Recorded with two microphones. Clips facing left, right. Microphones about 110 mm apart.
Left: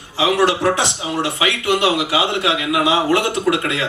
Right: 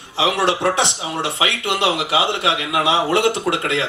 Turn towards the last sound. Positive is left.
turn(degrees=-25)  # may be behind; listen again after turning